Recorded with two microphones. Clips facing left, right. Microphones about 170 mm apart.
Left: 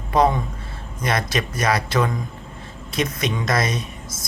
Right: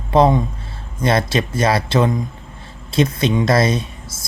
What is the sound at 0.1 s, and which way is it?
Speech, 25° right (ahead or behind).